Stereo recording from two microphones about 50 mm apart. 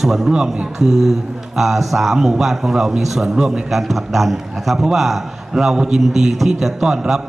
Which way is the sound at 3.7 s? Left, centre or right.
Centre.